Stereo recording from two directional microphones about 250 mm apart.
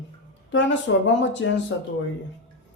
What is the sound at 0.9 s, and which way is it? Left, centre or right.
Speech, left.